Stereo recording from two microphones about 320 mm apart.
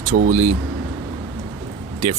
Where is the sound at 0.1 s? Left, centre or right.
Right.